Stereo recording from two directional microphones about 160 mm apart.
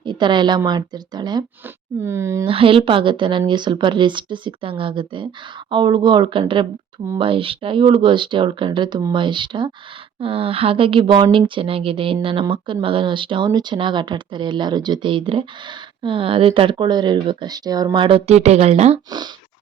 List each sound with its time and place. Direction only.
0.0 s a woman's voice: 30° right (ahead or behind)
2.5 s a woman's voice: 35° right (ahead or behind)